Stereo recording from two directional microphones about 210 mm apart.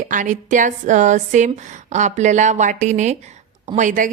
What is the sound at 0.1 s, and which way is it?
A woman's voice, 35° right (ahead or behind).